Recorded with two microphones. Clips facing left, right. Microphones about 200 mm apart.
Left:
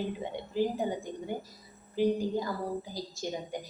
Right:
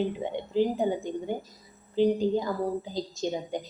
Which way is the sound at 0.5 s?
20° right (ahead or behind).